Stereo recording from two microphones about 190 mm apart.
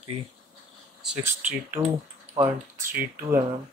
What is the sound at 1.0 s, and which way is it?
Speech, 5° right (ahead or behind).